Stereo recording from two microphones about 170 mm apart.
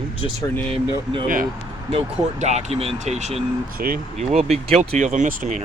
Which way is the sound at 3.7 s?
60° right (ahead or behind).